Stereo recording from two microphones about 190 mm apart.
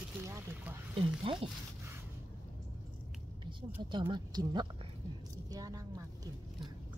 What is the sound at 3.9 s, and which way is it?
A woman's voice, 25° right (ahead or behind).